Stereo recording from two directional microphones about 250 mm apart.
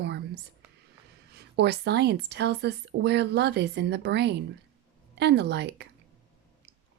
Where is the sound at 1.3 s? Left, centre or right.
Right.